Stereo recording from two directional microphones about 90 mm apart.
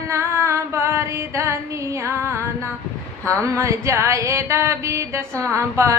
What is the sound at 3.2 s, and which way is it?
Speech, 15° left (ahead or behind).